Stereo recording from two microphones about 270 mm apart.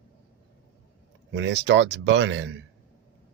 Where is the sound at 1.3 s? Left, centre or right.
Right.